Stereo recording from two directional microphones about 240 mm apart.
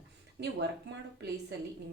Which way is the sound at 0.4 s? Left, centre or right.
Right.